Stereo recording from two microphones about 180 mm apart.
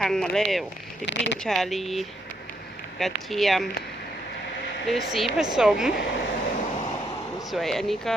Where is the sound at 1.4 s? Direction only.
Centre (ahead or behind).